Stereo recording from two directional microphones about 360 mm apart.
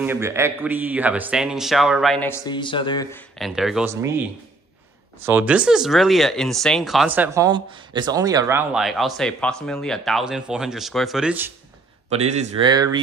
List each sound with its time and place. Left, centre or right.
0.0 s speech: centre
5.2 s speech: centre
12.1 s speech: centre